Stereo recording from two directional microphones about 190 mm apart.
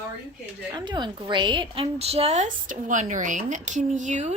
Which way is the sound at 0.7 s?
20° right (ahead or behind).